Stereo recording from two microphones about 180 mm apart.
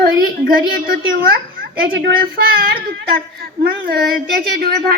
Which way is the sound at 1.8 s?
85° right.